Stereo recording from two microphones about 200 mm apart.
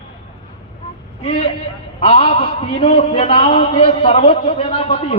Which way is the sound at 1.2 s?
30° left (ahead or behind).